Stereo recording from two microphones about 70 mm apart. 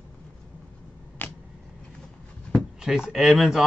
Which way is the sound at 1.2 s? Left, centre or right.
Left.